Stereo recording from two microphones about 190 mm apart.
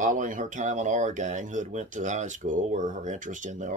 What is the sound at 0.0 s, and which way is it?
Speech, 40° right (ahead or behind).